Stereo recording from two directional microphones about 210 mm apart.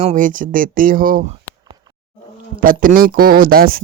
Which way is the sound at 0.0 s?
35° right (ahead or behind).